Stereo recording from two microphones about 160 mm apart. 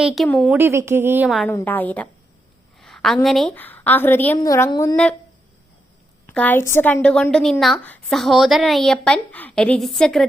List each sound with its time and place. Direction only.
0.0 s a woman's voice: centre (ahead or behind)
0.5 s speech: 15° right (ahead or behind)
1.5 s a woman's voice: 10° left (ahead or behind)
2.8 s a sound: centre (ahead or behind)
3.2 s a woman's voice: centre (ahead or behind); by 4.9 s 20° left (ahead or behind)
6.2 s a woman's voice: 10° left (ahead or behind)